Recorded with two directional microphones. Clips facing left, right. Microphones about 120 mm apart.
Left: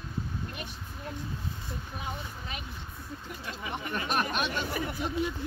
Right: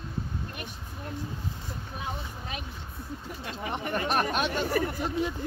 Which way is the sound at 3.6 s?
50° right (ahead or behind).